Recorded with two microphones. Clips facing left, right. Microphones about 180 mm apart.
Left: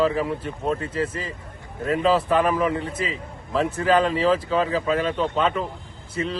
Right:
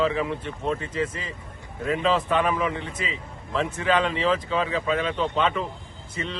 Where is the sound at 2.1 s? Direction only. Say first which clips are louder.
Left 3 dB; 5° left (ahead or behind).